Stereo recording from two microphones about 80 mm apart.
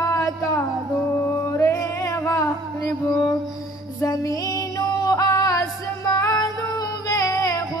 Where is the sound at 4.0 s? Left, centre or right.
Left.